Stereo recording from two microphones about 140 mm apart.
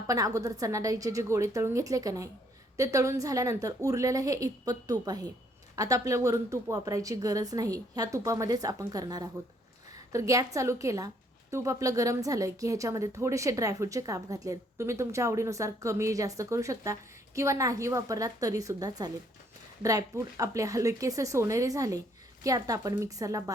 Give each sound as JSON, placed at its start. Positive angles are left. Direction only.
{"t": 0.1, "sound": "a woman's voice", "side_deg": -25}